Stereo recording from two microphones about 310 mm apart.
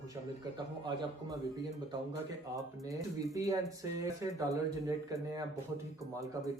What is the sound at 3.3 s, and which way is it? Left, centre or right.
Speech, centre.